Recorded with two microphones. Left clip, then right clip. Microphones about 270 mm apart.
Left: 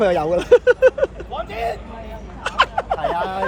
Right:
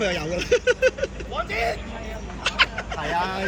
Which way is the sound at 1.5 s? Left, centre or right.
Left.